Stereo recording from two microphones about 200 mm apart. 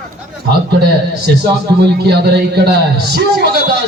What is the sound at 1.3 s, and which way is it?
A man's voice, 55° right (ahead or behind).